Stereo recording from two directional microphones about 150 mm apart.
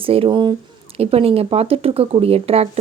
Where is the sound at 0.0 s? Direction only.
40° right (ahead or behind).